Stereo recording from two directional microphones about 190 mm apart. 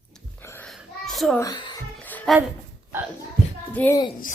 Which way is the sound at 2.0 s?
10° left (ahead or behind).